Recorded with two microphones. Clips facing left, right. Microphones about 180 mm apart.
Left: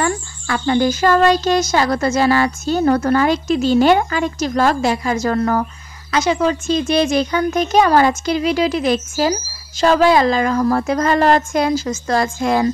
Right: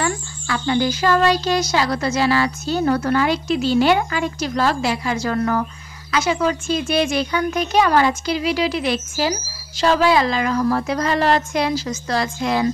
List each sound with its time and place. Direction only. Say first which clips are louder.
0.0 s speech: left 3 dB; 45° left (ahead or behind)